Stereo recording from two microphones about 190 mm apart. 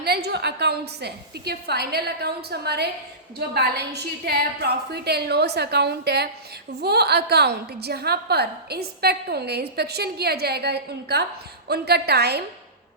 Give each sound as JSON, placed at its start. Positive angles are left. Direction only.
{"t": 0.0, "sound": "a woman's voice", "side_deg": -55}